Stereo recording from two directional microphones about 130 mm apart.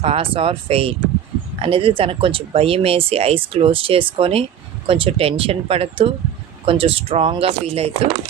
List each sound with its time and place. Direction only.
0.0 s speech: 45° right (ahead or behind)